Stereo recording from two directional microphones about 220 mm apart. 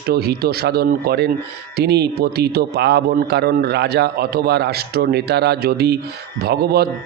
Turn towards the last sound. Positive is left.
turn(degrees=-45)  # may be behind; listen again after turning